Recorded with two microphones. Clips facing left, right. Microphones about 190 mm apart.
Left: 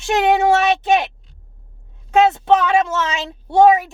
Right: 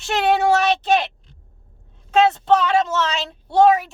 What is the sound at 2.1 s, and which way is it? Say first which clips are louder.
Speech: left 2 dB; 15° left (ahead or behind).